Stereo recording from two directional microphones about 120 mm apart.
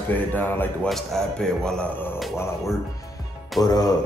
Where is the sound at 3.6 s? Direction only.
35° left (ahead or behind).